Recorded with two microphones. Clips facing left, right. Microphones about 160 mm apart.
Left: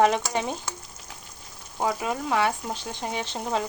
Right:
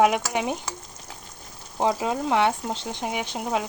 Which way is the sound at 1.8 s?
25° right (ahead or behind).